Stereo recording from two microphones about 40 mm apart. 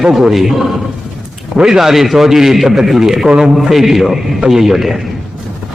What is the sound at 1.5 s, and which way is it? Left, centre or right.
Speech, centre.